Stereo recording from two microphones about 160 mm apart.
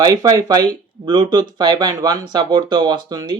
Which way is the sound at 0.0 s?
25° right (ahead or behind).